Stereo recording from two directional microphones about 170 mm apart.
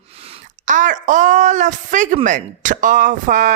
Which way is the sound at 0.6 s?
45° right (ahead or behind).